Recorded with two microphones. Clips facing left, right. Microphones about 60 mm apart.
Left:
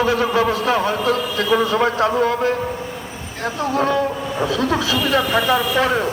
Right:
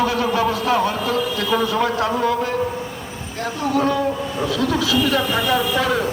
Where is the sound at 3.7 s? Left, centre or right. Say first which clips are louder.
Even; left.